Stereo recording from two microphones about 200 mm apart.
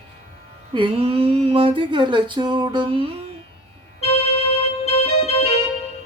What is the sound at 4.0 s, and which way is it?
Keyboard, 30° left (ahead or behind).